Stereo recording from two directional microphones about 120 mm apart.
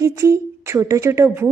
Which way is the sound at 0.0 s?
25° right (ahead or behind).